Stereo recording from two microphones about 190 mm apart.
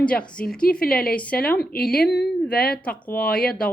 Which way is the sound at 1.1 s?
5° left (ahead or behind).